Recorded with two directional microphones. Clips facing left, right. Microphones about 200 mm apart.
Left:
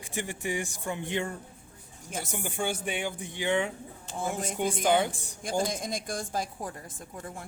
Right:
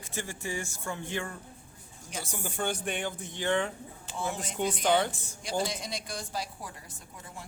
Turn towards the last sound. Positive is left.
turn(degrees=50)  # may be behind; listen again after turning